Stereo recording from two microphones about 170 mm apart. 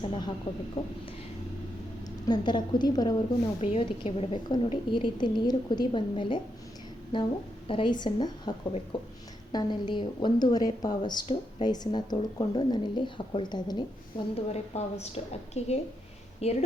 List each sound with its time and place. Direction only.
0.0 s a woman's voice: 30° left (ahead or behind)
2.2 s a woman's voice: 25° left (ahead or behind)
14.3 s a woman's voice: 40° left (ahead or behind)